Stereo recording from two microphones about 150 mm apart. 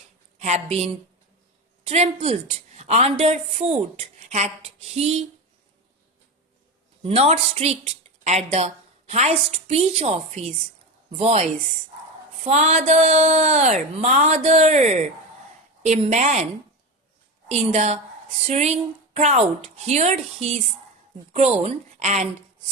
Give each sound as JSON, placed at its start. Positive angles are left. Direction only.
{"t": 0.3, "sound": "a woman's voice", "side_deg": -45}
{"t": 7.0, "sound": "a woman's voice", "side_deg": -40}
{"t": 12.5, "sound": "a woman's voice", "side_deg": -45}
{"t": 17.5, "sound": "a woman's voice", "side_deg": -45}